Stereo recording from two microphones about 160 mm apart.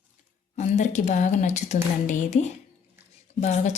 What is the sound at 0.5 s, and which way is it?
Speech, 50° left (ahead or behind).